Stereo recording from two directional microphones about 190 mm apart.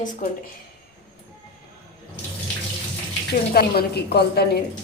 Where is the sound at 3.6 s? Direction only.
55° left (ahead or behind).